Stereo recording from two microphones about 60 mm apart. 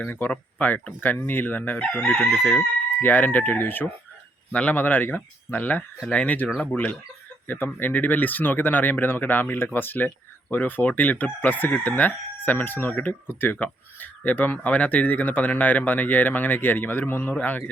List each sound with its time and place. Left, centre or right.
0.0 s speech: left